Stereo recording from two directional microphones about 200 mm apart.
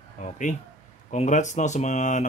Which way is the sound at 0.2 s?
35° left (ahead or behind).